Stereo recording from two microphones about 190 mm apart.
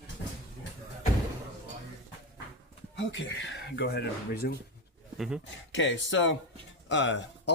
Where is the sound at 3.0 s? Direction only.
70° left (ahead or behind); by 4.5 s 55° left (ahead or behind).